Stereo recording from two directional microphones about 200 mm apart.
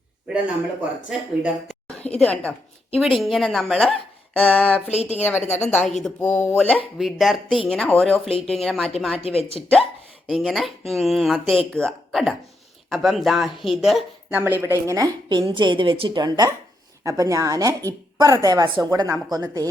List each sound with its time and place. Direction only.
1.4 s a woman's voice: centre (ahead or behind)
4.9 s a woman's voice: 35° left (ahead or behind)
5.2 s speech: 10° left (ahead or behind)
9.1 s speech: 30° left (ahead or behind)
10.2 s speech: centre (ahead or behind); by 19.6 s 20° right (ahead or behind)